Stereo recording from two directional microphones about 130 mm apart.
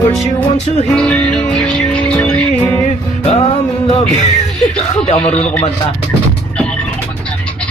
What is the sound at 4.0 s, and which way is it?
Music, 60° left (ahead or behind).